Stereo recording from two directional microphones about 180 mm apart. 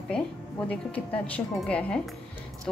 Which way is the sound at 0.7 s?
5° left (ahead or behind).